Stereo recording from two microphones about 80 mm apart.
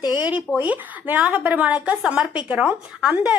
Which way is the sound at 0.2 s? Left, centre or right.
Centre.